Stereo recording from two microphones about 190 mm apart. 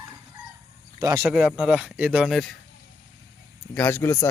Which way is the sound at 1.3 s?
5° right (ahead or behind).